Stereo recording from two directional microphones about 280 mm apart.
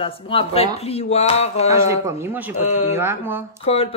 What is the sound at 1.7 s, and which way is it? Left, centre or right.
Speech, centre.